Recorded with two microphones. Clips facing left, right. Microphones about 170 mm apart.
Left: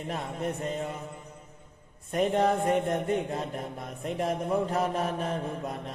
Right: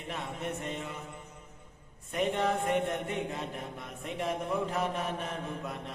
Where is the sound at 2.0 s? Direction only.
40° left (ahead or behind).